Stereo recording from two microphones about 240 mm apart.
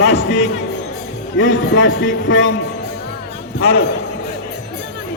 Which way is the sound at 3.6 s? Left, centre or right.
Left.